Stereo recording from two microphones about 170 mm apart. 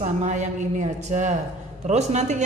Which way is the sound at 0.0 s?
45° right (ahead or behind).